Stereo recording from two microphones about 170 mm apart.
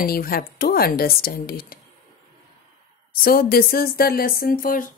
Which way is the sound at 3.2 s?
60° left (ahead or behind).